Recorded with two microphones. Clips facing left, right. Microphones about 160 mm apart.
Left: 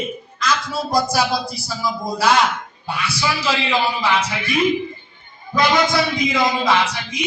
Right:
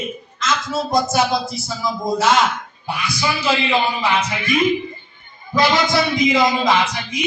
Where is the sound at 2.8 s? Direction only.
15° right (ahead or behind).